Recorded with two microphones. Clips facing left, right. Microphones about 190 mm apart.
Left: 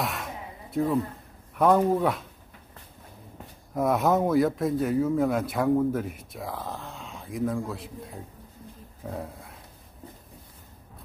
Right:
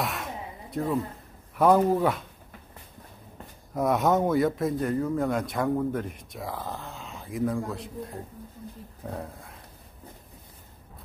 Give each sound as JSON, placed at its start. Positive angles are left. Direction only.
{"t": 0.0, "sound": "a sound", "side_deg": 0}
{"t": 1.6, "sound": "speech", "side_deg": 0}
{"t": 3.7, "sound": "speech", "side_deg": 0}
{"t": 9.0, "sound": "dog", "side_deg": 0}